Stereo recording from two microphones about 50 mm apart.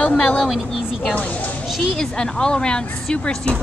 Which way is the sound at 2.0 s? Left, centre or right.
Centre.